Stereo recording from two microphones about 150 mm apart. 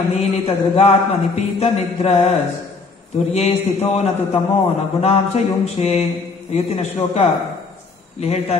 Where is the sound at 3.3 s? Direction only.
45° left (ahead or behind).